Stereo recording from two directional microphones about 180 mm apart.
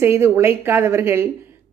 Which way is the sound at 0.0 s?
15° right (ahead or behind).